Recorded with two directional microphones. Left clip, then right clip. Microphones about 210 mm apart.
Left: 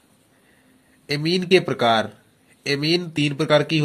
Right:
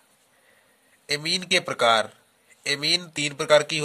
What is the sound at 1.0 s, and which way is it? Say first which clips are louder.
Speech: left 3 dB; 35° right (ahead or behind).